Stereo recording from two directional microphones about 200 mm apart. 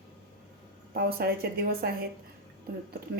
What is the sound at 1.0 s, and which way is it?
Speech, 50° right (ahead or behind).